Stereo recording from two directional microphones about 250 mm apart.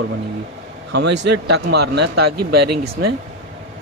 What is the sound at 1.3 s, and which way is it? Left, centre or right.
Speech, right.